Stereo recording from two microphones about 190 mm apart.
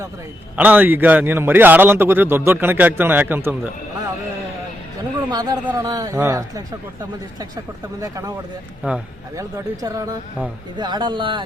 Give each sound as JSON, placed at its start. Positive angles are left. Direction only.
{"t": 0.5, "sound": "a man's voice", "side_deg": -10}
{"t": 5.3, "sound": "a man's voice", "side_deg": -20}
{"t": 8.0, "sound": "a man's voice", "side_deg": -20}
{"t": 8.8, "sound": "a man's voice", "side_deg": -10}